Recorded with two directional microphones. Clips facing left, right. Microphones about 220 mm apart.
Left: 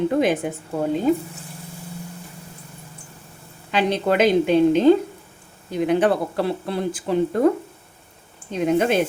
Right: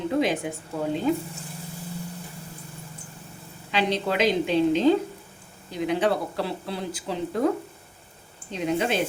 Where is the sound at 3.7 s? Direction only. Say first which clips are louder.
Left 5 dB; 50° left (ahead or behind).